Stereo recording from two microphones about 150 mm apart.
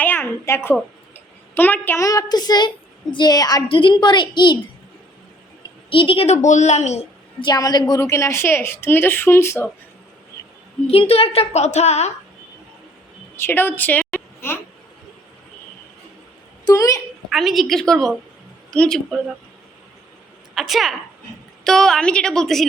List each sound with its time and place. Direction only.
0.0 s a sound: 15° left (ahead or behind)
2.0 s a woman's voice: 25° left (ahead or behind)
5.9 s a woman's voice: 35° left (ahead or behind)
7.4 s a woman's voice: 25° left (ahead or behind)
10.8 s a woman's voice: 40° left (ahead or behind)
13.3 s a sound: 15° left (ahead or behind)
16.6 s a sound: 20° left (ahead or behind)
17.2 s a woman's voice: centre (ahead or behind)
20.6 s a woman's voice: centre (ahead or behind)